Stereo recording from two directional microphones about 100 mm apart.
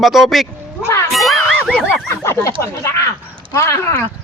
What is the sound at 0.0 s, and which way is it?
Speech, centre (ahead or behind).